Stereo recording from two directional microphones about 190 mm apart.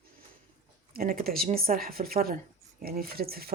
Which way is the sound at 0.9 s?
50° right (ahead or behind).